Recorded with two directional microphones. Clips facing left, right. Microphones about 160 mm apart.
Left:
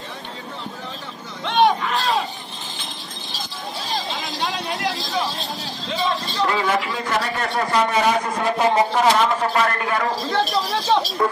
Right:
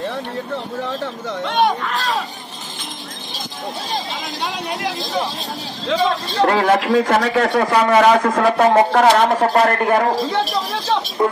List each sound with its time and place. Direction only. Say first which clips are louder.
1.4 s a sound: left 1 dB; 5° right (ahead or behind)
5.9 s a man's voice: right 5 dB; 55° right (ahead or behind); by 8.5 s 85° right
8.5 s a man's voice: right 3 dB; 60° right (ahead or behind)
11.2 s speech: right 3 dB; 20° right (ahead or behind)